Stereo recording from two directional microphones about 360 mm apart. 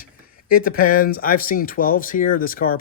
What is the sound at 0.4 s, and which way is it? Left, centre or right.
Speech, left.